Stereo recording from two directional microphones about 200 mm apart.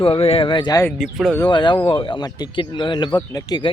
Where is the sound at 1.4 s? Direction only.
25° left (ahead or behind).